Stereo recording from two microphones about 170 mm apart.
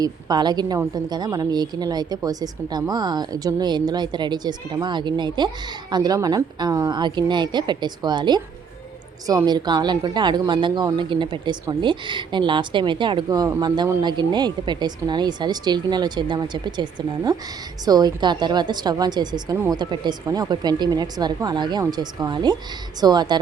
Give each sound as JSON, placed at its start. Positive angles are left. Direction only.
{"t": 0.0, "sound": "a woman's voice", "side_deg": -25}